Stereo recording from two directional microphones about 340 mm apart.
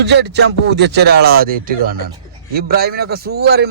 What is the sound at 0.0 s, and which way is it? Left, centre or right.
A man's voice, right.